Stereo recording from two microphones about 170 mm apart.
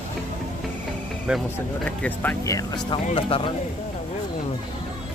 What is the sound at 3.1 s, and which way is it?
Speech, 35° left (ahead or behind).